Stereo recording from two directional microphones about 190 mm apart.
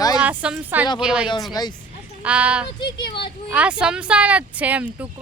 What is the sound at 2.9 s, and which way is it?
Speech, 25° left (ahead or behind).